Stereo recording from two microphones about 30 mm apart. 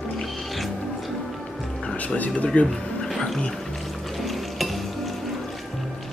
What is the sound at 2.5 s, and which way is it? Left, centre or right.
Speech, left.